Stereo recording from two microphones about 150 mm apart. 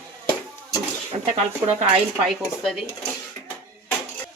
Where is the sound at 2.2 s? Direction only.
Centre (ahead or behind).